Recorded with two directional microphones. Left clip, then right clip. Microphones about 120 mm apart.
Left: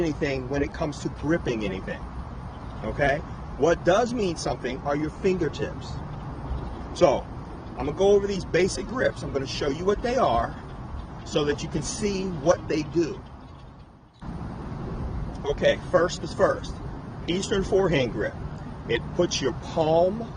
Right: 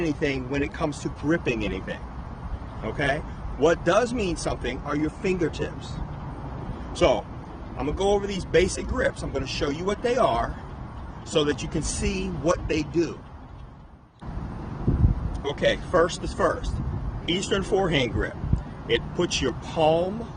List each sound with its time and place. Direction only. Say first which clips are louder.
0.0 s speech: even; 45° right (ahead or behind)
7.8 s speech: left 3 dB; 45° right (ahead or behind)
15.5 s speech: even; 45° right (ahead or behind)